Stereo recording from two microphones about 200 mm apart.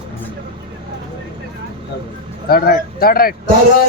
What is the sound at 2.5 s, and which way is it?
Speech, 50° left (ahead or behind).